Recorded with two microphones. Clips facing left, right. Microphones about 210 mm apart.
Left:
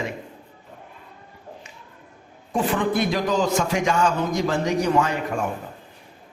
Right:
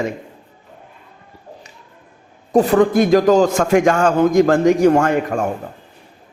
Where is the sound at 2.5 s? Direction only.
40° right (ahead or behind).